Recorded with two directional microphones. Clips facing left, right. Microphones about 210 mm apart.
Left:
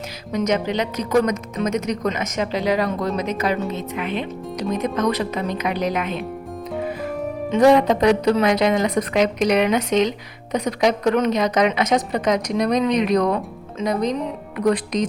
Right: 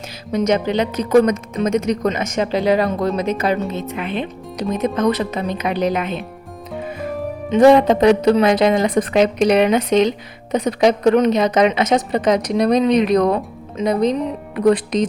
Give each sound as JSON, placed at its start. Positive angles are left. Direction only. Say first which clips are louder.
{"t": 0.3, "sound": "a woman's voice", "louder": "right 4 dB", "side_deg": -30}
{"t": 7.6, "sound": "a woman's voice", "louder": "right 4 dB", "side_deg": -25}
{"t": 14.5, "sound": "a woman's voice", "louder": "right 4 dB", "side_deg": -30}